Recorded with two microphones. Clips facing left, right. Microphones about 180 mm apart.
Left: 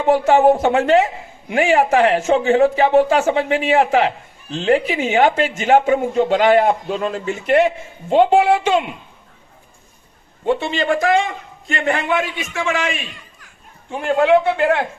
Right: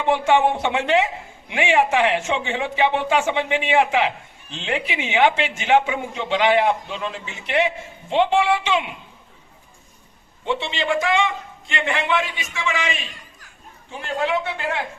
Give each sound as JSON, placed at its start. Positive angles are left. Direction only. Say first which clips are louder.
{"t": 0.0, "sound": "a man's voice", "louder": "left 5 dB", "side_deg": 40}
{"t": 10.4, "sound": "a man's voice", "louder": "left 6 dB", "side_deg": 45}